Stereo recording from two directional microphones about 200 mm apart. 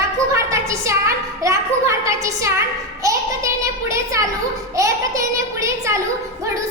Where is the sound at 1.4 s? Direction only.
15° right (ahead or behind).